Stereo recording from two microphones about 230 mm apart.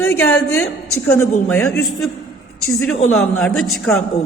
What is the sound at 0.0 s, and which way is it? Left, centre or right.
A woman's voice, centre.